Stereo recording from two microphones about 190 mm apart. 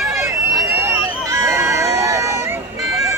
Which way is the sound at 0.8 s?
15° right (ahead or behind).